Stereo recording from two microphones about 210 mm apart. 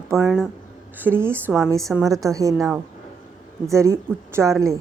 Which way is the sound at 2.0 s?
15° right (ahead or behind).